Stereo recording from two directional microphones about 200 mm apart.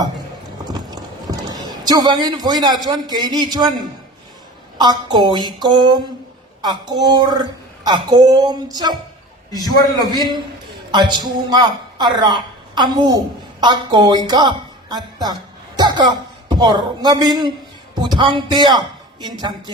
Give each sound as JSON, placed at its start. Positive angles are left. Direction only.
{"t": 0.6, "sound": "a woman's voice", "side_deg": -20}
{"t": 9.5, "sound": "a man's voice", "side_deg": 20}
{"t": 10.2, "sound": "a woman's voice", "side_deg": -20}